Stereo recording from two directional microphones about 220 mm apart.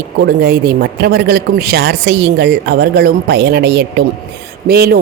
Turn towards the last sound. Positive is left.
turn(degrees=-45)  # may be behind; listen again after turning